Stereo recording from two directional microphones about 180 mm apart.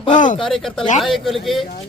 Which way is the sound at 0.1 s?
45° left (ahead or behind).